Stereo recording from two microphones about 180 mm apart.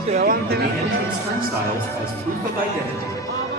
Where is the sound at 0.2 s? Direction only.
60° right (ahead or behind).